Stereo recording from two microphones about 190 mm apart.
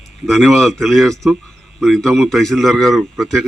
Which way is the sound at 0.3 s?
Centre (ahead or behind).